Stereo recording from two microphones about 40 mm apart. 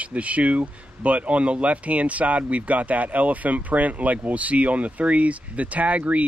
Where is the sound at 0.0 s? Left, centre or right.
Right.